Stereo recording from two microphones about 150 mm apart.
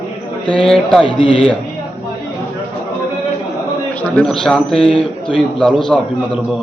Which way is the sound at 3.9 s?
10° left (ahead or behind).